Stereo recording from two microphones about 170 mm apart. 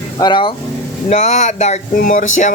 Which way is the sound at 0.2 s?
25° left (ahead or behind).